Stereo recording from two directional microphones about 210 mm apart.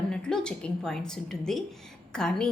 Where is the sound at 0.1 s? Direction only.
5° left (ahead or behind).